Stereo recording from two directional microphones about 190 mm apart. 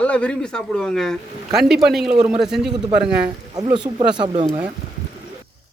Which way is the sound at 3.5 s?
20° right (ahead or behind).